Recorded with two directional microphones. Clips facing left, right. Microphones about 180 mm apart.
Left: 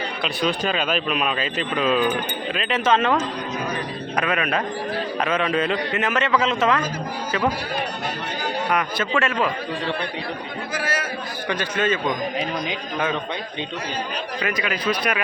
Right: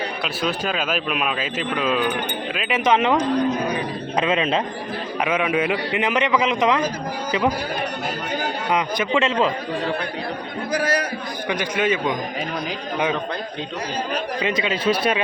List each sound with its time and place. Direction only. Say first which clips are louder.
0.2 s a man's voice: left 4 dB; 5° right (ahead or behind); by 4.6 s 25° right (ahead or behind)
5.2 s a man's voice: right 2 dB; 10° right (ahead or behind)
8.7 s a man's voice: right 4 dB; 20° right (ahead or behind)
10.7 s a man's voice: right 6 dB; 40° right (ahead or behind)
11.4 s a man's voice: right 1 dB; 15° right (ahead or behind)
14.4 s a man's voice: right 3 dB; 25° right (ahead or behind)